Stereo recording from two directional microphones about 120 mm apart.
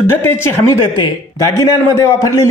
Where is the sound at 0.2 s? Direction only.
15° left (ahead or behind).